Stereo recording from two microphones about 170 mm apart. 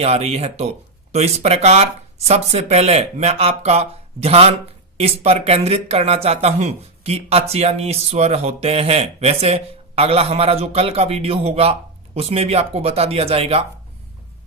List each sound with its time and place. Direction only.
0.0 s speech: 40° right (ahead or behind)